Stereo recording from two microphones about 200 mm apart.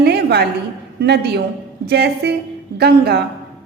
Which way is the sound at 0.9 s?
55° right (ahead or behind).